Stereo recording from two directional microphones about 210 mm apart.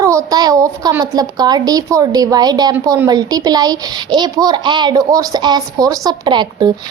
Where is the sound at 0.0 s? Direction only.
15° right (ahead or behind).